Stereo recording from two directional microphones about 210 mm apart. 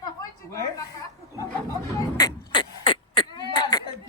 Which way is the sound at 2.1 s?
20° left (ahead or behind).